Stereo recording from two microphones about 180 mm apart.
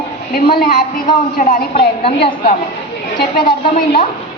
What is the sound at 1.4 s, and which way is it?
Speech, 50° left (ahead or behind).